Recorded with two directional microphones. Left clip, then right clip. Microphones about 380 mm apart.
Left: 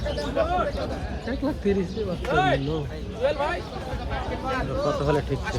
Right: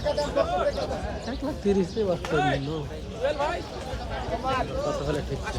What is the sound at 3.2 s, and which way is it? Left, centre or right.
Speech, left.